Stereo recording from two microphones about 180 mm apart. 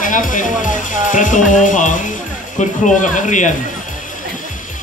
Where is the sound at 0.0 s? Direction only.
45° left (ahead or behind).